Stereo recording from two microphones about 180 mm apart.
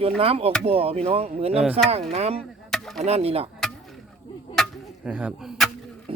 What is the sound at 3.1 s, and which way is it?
Speech, 35° right (ahead or behind).